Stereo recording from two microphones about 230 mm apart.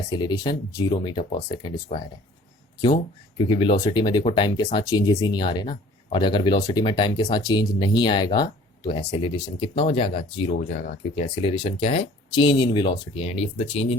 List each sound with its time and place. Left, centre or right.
0.1 s speech: centre